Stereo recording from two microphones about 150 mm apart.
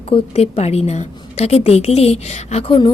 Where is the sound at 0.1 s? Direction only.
45° left (ahead or behind).